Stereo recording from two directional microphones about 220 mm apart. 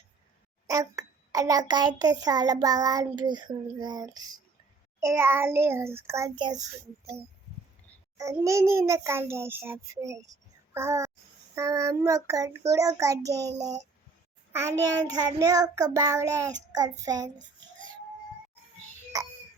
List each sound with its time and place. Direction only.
0.7 s a child's voice: 15° right (ahead or behind)
8.2 s a child's voice: 15° right (ahead or behind)